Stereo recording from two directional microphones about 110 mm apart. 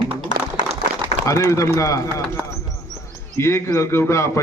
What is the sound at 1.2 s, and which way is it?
A man's voice, 30° left (ahead or behind).